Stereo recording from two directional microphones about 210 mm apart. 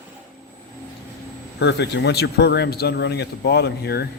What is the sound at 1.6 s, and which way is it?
Speech, 55° left (ahead or behind).